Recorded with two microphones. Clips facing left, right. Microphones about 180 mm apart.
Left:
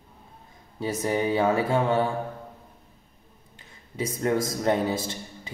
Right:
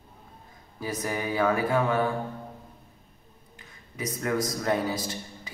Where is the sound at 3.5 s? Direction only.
30° left (ahead or behind).